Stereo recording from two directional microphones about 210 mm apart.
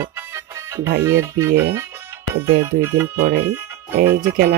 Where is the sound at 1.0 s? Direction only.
15° right (ahead or behind).